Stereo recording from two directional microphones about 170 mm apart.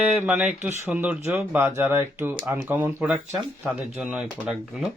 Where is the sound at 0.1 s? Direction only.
10° right (ahead or behind).